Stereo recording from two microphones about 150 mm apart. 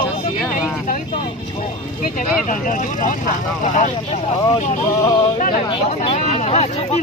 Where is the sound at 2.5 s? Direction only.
60° left (ahead or behind).